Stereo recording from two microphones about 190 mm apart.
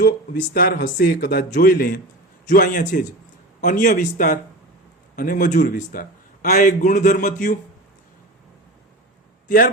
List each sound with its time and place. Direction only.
0.5 s a man's voice: 55° left (ahead or behind)